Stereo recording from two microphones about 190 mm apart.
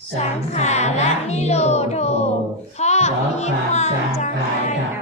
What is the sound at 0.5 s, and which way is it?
Music, 35° left (ahead or behind).